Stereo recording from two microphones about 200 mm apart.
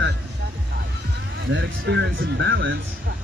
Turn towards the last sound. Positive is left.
turn(degrees=-65)  # may be behind; listen again after turning